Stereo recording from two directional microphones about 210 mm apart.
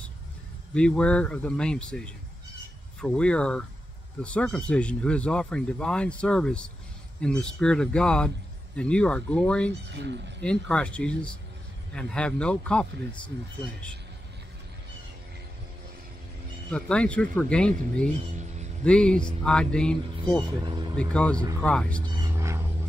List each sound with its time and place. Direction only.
0.7 s speech: 5° left (ahead or behind)
9.8 s speech: 55° right (ahead or behind)
10.4 s speech: 5° left (ahead or behind)
16.7 s speech: 5° left (ahead or behind)
18.9 s speech: 5° left (ahead or behind)
20.6 s speech: 20° right (ahead or behind)
21.0 s speech: 5° left (ahead or behind)
22.0 s a sound: 15° right (ahead or behind)